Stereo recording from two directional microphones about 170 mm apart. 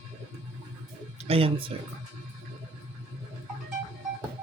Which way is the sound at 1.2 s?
35° right (ahead or behind).